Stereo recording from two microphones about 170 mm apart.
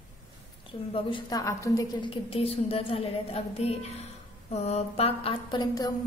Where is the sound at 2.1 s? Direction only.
35° left (ahead or behind).